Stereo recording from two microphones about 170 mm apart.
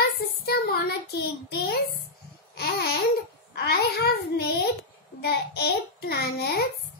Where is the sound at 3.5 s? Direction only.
70° left (ahead or behind).